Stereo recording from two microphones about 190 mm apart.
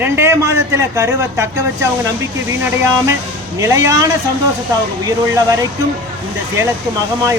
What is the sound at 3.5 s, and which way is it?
Speech, 15° right (ahead or behind).